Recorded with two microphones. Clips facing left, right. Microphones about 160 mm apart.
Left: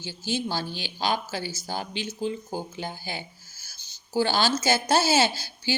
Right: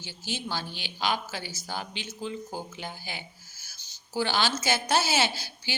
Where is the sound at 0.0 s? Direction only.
30° left (ahead or behind).